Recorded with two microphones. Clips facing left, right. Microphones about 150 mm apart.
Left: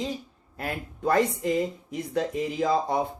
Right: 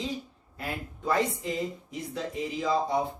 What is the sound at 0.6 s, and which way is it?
Speech, 50° left (ahead or behind).